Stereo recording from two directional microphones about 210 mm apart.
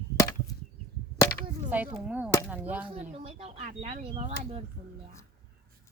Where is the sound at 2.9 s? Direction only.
30° right (ahead or behind).